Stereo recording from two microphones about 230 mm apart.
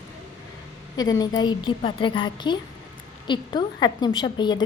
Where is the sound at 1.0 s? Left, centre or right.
Centre.